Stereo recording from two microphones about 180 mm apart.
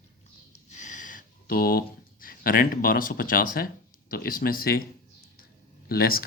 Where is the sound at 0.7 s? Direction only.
45° left (ahead or behind).